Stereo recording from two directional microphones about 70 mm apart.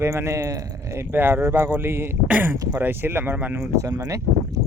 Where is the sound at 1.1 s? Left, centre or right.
Right.